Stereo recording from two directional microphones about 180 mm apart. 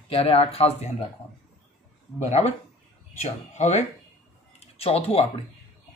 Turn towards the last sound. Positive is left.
turn(degrees=35)  # may be behind; listen again after turning